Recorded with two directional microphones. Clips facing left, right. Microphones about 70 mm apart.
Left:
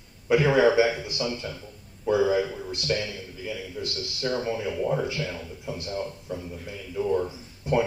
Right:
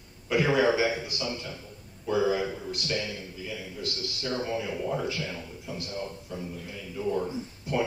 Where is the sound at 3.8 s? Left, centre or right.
Left.